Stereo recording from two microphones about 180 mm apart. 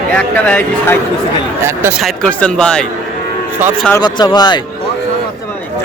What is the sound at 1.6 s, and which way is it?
Speech, 15° right (ahead or behind).